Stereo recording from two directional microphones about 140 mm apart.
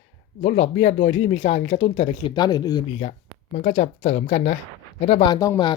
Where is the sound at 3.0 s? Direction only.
65° left (ahead or behind).